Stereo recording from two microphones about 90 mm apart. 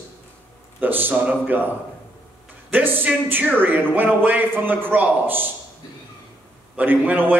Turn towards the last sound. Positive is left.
turn(degrees=-20)  # may be behind; listen again after turning